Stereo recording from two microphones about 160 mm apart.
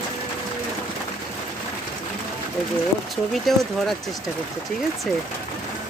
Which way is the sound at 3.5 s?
Centre (ahead or behind).